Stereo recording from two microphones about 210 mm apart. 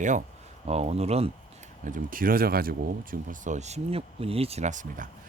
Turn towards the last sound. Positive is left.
turn(degrees=-35)  # may be behind; listen again after turning